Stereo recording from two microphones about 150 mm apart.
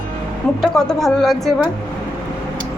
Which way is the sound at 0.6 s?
Centre (ahead or behind).